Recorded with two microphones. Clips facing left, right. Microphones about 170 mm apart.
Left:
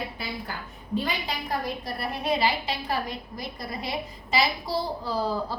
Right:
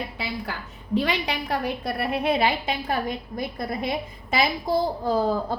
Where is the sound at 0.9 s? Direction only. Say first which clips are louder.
Right 5 dB; 75° right (ahead or behind).